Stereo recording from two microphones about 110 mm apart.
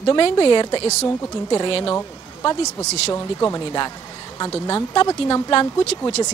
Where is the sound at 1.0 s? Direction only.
25° left (ahead or behind).